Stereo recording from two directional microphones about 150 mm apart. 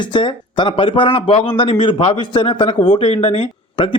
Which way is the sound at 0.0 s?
30° left (ahead or behind).